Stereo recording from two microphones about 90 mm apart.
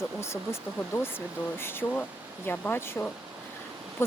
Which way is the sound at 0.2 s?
30° left (ahead or behind).